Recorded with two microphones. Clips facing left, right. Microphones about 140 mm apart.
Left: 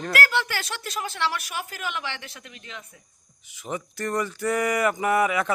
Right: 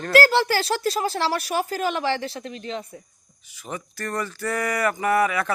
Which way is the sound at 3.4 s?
20° left (ahead or behind).